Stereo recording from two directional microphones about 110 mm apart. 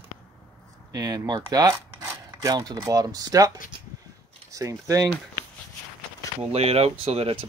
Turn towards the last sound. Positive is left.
turn(degrees=-65)  # may be behind; listen again after turning